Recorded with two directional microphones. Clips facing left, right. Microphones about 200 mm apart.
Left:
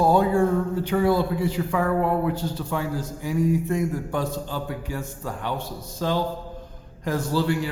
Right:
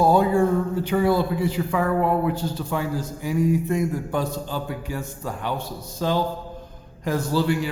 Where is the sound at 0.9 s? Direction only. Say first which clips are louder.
Even; 10° right (ahead or behind).